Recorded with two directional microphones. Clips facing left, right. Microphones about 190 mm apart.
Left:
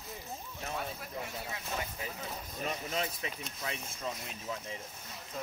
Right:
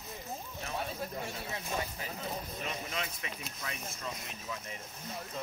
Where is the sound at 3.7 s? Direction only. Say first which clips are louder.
Left 4 dB; 30° left (ahead or behind).